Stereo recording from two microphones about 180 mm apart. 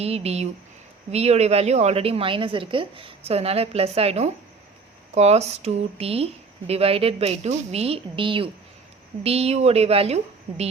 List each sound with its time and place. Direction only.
0.0 s a woman's voice: 35° right (ahead or behind)